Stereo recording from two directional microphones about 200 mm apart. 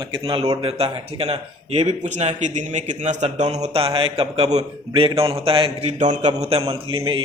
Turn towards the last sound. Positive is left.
turn(degrees=-25)  # may be behind; listen again after turning